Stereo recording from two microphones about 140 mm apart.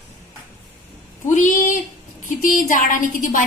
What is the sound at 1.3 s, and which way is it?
A woman's voice, 60° left (ahead or behind).